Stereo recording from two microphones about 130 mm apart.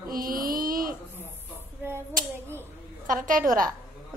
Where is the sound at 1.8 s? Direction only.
15° right (ahead or behind).